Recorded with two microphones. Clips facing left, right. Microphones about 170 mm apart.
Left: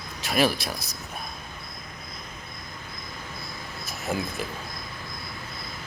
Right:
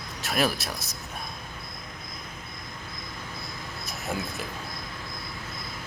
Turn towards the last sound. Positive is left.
turn(degrees=0)  # may be behind; listen again after turning